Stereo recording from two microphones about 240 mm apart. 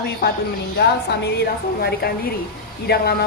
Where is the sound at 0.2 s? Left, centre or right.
Left.